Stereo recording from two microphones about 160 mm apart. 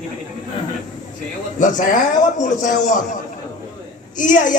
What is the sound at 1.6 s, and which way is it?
Speech, 55° left (ahead or behind).